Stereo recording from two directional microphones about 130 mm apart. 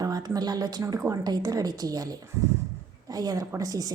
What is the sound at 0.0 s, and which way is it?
A woman's voice, 30° right (ahead or behind).